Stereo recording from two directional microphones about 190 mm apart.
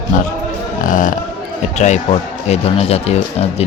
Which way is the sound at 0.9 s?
45° left (ahead or behind).